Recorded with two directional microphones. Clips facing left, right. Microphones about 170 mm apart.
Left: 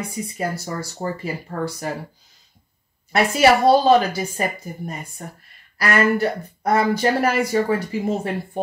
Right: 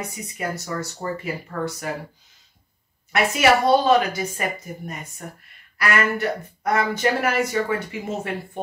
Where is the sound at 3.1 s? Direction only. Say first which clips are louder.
Left 3 dB; 35° left (ahead or behind).